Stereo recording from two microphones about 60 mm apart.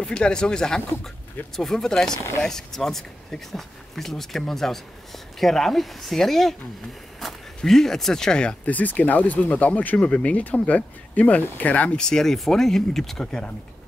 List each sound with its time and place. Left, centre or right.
0.0 s speech: centre
8.6 s speech: left
12.0 s speech: centre